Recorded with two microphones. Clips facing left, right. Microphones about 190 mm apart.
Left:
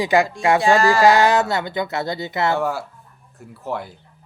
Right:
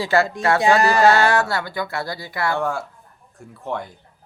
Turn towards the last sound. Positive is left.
turn(degrees=5)  # may be behind; listen again after turning